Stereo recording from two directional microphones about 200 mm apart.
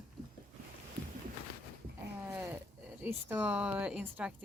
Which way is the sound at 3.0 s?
10° right (ahead or behind).